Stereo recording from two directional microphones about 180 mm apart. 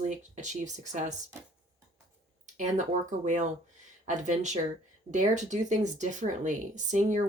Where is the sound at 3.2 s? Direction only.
40° right (ahead or behind).